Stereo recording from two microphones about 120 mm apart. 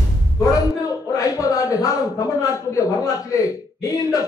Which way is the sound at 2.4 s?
25° left (ahead or behind).